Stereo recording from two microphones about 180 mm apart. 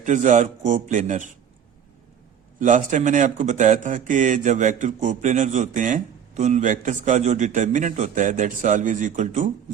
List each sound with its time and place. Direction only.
0.0 s speech: 45° right (ahead or behind)
2.6 s speech: 45° right (ahead or behind)